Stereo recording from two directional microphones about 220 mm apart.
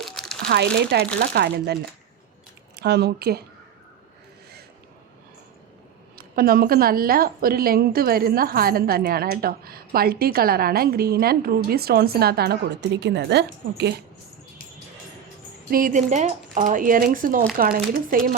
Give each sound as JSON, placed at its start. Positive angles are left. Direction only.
{"t": 0.0, "sound": "crumpling", "side_deg": 0}
{"t": 0.4, "sound": "a woman's voice", "side_deg": -50}
{"t": 6.1, "sound": "a woman's voice", "side_deg": -40}
{"t": 15.7, "sound": "speech", "side_deg": -35}